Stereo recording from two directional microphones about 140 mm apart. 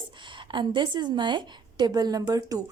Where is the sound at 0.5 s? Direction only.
35° right (ahead or behind).